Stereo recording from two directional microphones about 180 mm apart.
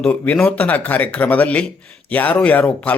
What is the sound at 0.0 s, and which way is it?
Speech, 10° left (ahead or behind).